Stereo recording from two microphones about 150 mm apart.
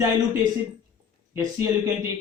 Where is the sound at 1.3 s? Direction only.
20° right (ahead or behind).